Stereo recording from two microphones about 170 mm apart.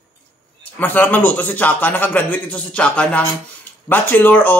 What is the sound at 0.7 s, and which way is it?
A man's voice, 10° left (ahead or behind).